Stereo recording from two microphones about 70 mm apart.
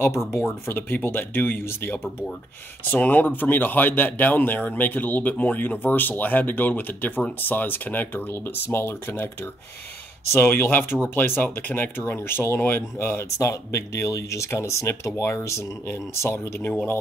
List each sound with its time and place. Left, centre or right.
0.4 s speech: left
10.3 s speech: left
13.4 s speech: left